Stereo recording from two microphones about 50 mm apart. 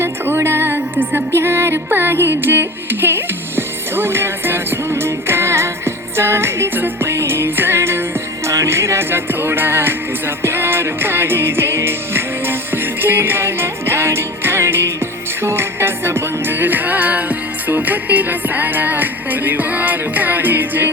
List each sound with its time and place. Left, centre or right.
0.0 s music: right
6.7 s music: right
7.1 s music: right
8.4 s music: right
9.0 s music: right